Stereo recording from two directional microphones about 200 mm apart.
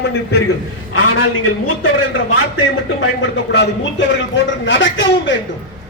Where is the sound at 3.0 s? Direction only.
70° left (ahead or behind).